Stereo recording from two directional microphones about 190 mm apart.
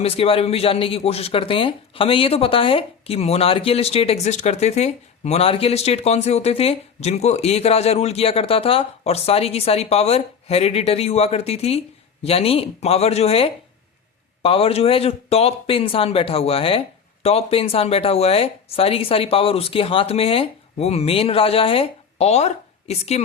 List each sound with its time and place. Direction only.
0.0 s speech: 30° left (ahead or behind)